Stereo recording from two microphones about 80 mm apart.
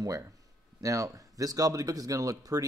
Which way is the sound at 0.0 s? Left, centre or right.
Right.